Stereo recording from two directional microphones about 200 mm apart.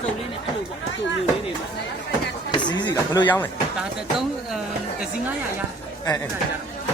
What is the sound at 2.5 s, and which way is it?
Chop, 20° left (ahead or behind).